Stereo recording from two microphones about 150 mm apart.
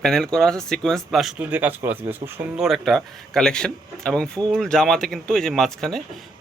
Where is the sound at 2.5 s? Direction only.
Centre (ahead or behind).